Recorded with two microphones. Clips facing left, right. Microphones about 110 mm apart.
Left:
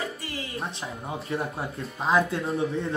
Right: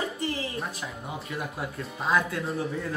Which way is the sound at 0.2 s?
30° right (ahead or behind).